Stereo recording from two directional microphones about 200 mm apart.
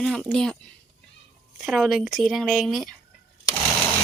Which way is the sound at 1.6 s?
Centre (ahead or behind).